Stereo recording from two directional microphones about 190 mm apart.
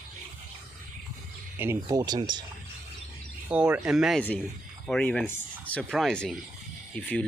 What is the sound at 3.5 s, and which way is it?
Speech, 5° right (ahead or behind).